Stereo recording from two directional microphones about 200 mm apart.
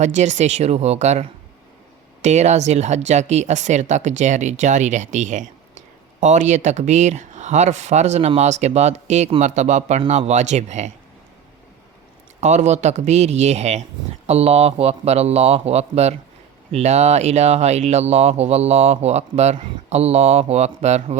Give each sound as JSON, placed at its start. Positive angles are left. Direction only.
{"t": 0.0, "sound": "speech", "side_deg": -35}
{"t": 12.4, "sound": "speech", "side_deg": -35}